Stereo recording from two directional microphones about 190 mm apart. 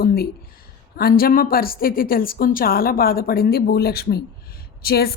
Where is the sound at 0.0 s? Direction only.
55° left (ahead or behind).